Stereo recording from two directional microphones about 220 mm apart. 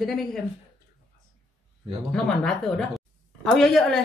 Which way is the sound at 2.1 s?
5° left (ahead or behind).